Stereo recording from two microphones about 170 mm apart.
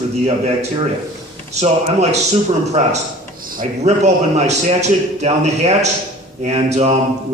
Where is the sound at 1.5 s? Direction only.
40° right (ahead or behind).